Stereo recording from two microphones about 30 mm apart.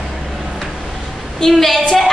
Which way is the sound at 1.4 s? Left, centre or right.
Centre.